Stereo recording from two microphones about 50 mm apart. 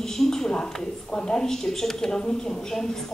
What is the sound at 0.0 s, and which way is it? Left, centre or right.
A woman's voice, centre.